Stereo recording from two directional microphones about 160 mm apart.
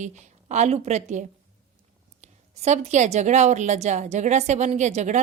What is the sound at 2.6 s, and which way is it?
A woman's voice, 45° right (ahead or behind).